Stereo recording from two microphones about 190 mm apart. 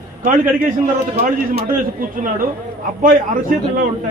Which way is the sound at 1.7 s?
45° right (ahead or behind).